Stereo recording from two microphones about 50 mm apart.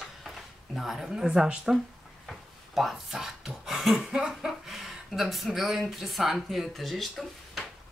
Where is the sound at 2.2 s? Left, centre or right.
Centre.